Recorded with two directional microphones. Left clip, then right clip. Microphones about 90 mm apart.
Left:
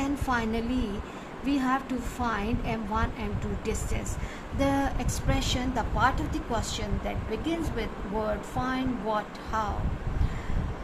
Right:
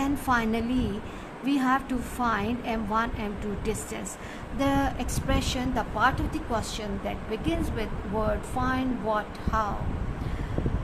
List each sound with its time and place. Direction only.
0.0 s a woman's voice: 40° right (ahead or behind)
4.5 s a woman's voice: 30° right (ahead or behind)